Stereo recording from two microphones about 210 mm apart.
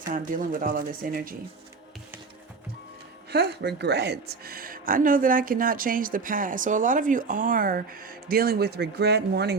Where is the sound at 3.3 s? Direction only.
50° right (ahead or behind).